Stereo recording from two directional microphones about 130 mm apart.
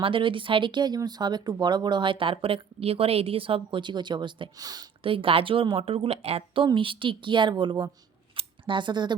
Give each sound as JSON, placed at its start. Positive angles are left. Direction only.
{"t": 0.0, "sound": "speech", "side_deg": -40}
{"t": 5.0, "sound": "a woman's voice", "side_deg": -45}
{"t": 8.4, "sound": "a sound", "side_deg": -40}